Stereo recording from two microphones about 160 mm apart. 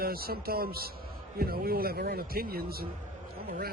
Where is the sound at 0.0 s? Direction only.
70° right (ahead or behind).